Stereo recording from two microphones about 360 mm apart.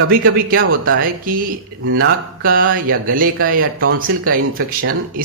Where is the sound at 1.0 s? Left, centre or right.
Right.